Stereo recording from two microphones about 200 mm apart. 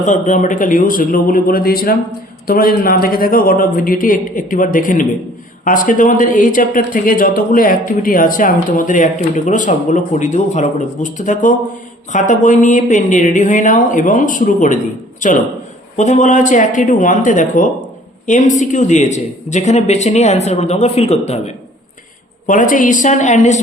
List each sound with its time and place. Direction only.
0.0 s a man's voice: 40° left (ahead or behind)